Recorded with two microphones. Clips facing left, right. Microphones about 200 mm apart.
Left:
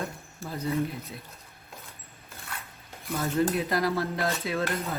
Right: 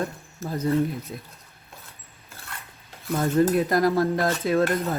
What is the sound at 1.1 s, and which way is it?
Dishes, 45° right (ahead or behind).